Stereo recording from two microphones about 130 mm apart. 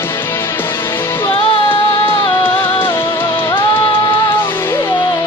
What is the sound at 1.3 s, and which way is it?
Music, 40° left (ahead or behind).